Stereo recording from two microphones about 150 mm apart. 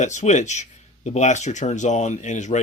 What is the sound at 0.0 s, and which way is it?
Speech, 55° left (ahead or behind).